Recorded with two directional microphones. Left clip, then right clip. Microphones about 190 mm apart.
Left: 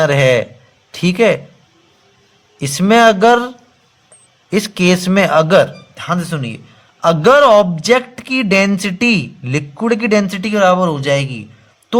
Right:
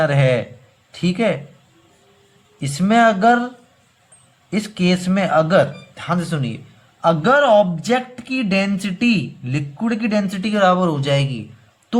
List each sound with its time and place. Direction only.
0.0 s a man's voice: 40° left (ahead or behind)
2.6 s a man's voice: 40° left (ahead or behind)
5.9 s speech: 25° left (ahead or behind)
7.0 s a man's voice: 45° left (ahead or behind)